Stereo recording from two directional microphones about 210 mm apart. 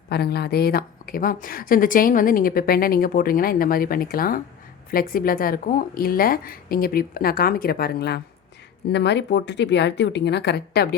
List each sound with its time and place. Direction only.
0.1 s speech: 50° left (ahead or behind)